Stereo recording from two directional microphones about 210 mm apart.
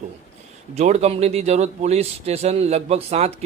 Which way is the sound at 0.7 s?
30° right (ahead or behind).